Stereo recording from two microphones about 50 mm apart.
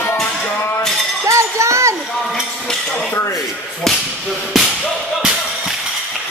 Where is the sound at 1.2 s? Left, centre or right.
Right.